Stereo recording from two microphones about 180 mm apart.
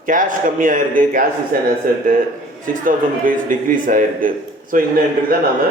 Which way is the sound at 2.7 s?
50° right (ahead or behind).